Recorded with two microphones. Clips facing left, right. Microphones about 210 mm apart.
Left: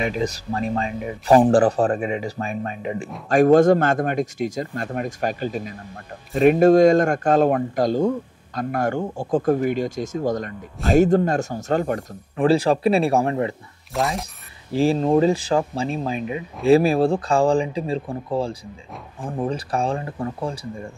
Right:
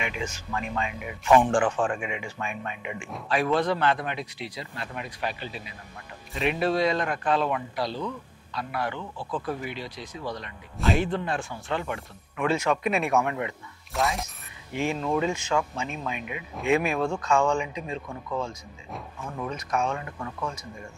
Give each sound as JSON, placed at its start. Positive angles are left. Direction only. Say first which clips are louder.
{"t": 0.0, "sound": "speech", "louder": "left 9 dB", "side_deg": 35}
{"t": 13.9, "sound": "speech", "louder": "left 4 dB", "side_deg": 0}
{"t": 14.7, "sound": "speech", "louder": "left 9 dB", "side_deg": 35}